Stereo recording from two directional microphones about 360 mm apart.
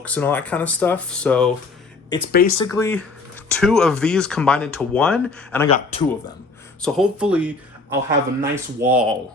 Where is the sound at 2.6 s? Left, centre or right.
Centre.